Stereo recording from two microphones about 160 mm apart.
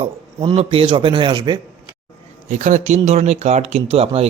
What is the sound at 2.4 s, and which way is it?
Speech, 50° right (ahead or behind).